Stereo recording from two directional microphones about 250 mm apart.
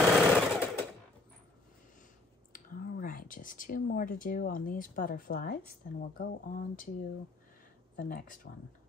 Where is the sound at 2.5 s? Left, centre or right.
Left.